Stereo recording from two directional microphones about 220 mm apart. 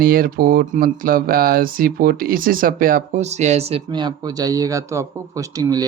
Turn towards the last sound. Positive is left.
turn(degrees=-15)  # may be behind; listen again after turning